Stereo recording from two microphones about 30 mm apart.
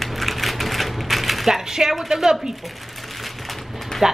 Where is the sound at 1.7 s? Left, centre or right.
Centre.